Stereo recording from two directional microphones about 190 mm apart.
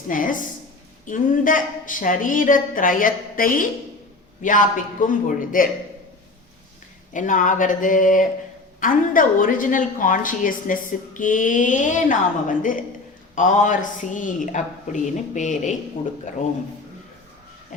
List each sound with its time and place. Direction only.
0.1 s a woman's voice: 45° left (ahead or behind)
7.1 s a woman's voice: 40° left (ahead or behind)